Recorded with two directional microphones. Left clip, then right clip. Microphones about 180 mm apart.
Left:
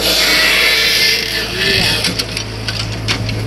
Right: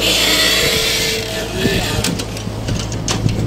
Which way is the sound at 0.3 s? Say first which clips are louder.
Left 3 dB; 55° right (ahead or behind).